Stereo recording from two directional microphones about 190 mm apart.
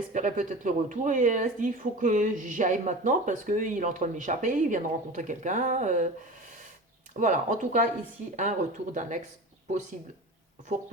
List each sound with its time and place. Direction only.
0.1 s speech: 40° right (ahead or behind)
7.2 s speech: 40° right (ahead or behind)